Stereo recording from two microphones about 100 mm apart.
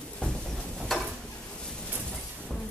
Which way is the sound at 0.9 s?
Centre (ahead or behind).